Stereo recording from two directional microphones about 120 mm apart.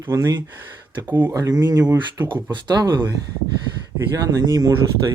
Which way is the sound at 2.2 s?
40° right (ahead or behind).